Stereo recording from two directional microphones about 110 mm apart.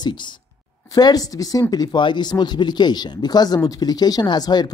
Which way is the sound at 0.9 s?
35° left (ahead or behind).